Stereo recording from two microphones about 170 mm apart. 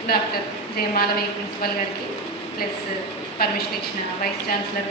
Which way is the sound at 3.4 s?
65° left (ahead or behind).